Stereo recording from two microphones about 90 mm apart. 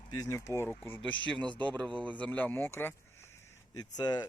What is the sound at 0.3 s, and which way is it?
Speech, 35° left (ahead or behind).